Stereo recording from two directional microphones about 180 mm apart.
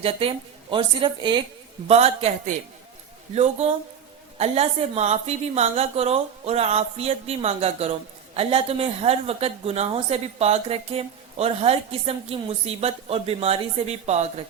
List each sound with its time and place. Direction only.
0.0 s a woman's voice: 30° right (ahead or behind)